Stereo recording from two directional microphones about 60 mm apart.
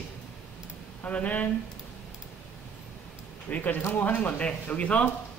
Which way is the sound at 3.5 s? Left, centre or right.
Left.